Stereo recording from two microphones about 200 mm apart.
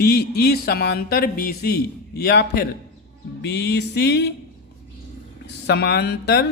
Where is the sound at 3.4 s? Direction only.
60° left (ahead or behind).